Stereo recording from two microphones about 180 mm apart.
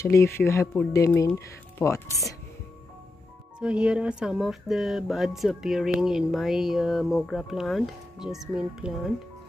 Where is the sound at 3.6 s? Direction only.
5° right (ahead or behind).